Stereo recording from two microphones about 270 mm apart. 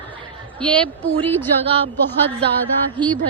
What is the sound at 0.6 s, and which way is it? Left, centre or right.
Speech, centre.